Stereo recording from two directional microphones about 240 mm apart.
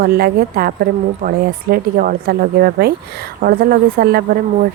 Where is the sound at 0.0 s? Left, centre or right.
Right.